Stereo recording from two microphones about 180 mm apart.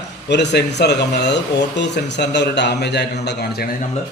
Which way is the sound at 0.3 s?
70° left (ahead or behind).